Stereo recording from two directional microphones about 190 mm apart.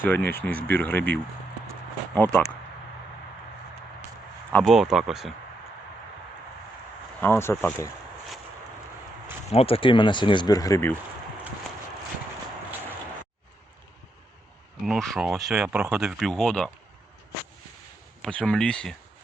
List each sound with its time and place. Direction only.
0.0 s speech: 10° left (ahead or behind)
4.5 s speech: centre (ahead or behind)
7.2 s speech: 10° left (ahead or behind)
9.5 s speech: 30° left (ahead or behind); by 10.9 s 15° left (ahead or behind)
14.8 s speech: centre (ahead or behind)
18.2 s speech: 5° left (ahead or behind)